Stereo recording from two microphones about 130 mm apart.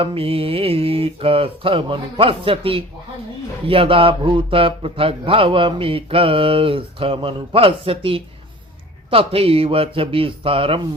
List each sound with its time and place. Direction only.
0.0 s speech: 45° right (ahead or behind)